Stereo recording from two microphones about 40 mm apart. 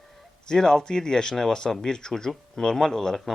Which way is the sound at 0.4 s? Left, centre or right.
Centre.